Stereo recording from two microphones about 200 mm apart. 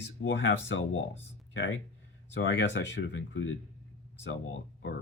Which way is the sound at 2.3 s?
70° left (ahead or behind).